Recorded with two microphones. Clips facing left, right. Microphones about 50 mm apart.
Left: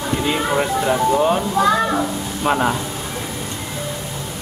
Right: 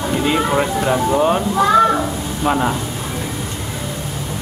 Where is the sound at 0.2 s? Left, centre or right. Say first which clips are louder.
Right 3 dB; centre.